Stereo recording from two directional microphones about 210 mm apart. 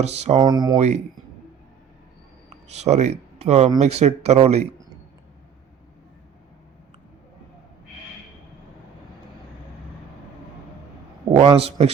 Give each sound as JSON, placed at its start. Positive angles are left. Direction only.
{"t": 0.0, "sound": "speech", "side_deg": -30}
{"t": 0.4, "sound": "a man's voice", "side_deg": -20}
{"t": 0.8, "sound": "speech", "side_deg": -30}
{"t": 2.6, "sound": "speech", "side_deg": -30}
{"t": 11.3, "sound": "a man's voice", "side_deg": -25}